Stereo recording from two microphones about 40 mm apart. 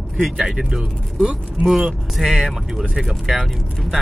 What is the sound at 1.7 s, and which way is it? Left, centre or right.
Speech, centre.